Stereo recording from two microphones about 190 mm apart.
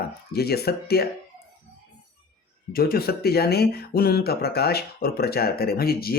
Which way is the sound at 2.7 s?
50° left (ahead or behind).